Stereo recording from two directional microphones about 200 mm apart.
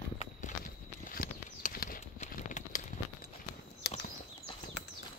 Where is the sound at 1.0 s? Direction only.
45° left (ahead or behind).